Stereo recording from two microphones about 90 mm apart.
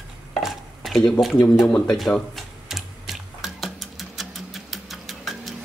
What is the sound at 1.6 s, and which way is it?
Speech, 5° left (ahead or behind).